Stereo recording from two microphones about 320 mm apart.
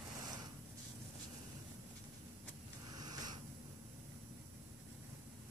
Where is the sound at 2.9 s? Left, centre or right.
Centre.